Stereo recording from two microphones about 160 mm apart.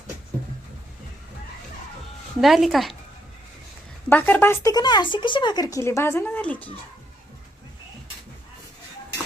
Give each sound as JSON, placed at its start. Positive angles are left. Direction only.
{"t": 2.4, "sound": "speech", "side_deg": 0}
{"t": 4.1, "sound": "a woman's voice", "side_deg": 10}
{"t": 4.7, "sound": "speech", "side_deg": 25}